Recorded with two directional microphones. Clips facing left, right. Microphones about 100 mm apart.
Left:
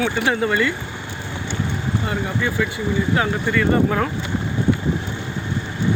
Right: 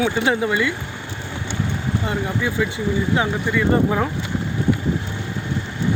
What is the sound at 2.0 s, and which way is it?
Speech, 15° right (ahead or behind).